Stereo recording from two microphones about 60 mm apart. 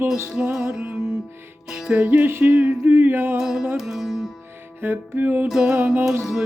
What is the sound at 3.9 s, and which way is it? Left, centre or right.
Music, centre.